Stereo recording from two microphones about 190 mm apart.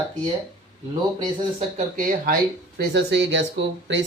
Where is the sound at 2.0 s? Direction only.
50° right (ahead or behind).